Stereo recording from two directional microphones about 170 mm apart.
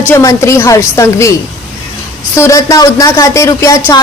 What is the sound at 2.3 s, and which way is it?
Speech, 20° left (ahead or behind).